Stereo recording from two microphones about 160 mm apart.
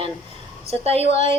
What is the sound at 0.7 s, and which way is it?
Speech, 40° right (ahead or behind).